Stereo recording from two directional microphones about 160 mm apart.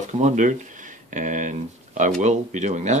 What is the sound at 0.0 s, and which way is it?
Speech, 50° right (ahead or behind).